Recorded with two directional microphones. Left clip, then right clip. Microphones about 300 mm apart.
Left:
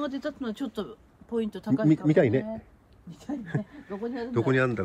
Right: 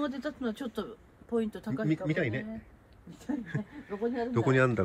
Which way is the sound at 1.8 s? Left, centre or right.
Centre.